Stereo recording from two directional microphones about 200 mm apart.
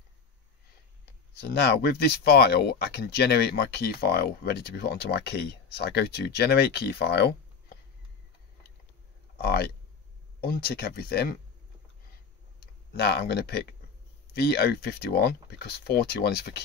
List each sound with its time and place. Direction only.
1.3 s speech: 55° left (ahead or behind)
9.4 s speech: 50° left (ahead or behind)
12.5 s speech: 55° left (ahead or behind)